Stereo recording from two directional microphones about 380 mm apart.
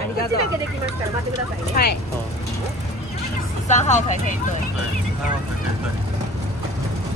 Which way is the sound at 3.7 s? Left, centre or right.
Centre.